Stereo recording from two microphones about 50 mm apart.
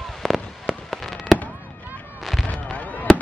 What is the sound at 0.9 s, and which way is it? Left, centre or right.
Fireworks, centre.